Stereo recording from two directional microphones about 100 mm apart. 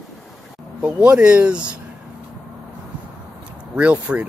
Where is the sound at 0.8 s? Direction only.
10° right (ahead or behind).